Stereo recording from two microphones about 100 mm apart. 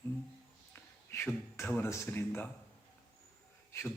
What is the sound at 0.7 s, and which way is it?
A man's voice, 20° left (ahead or behind).